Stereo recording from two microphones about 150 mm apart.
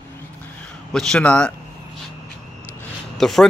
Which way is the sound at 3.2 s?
Centre (ahead or behind).